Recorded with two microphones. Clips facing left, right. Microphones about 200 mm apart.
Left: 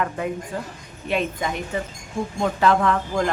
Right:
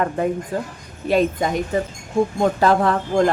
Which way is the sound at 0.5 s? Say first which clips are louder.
Right 5 dB; 35° right (ahead or behind).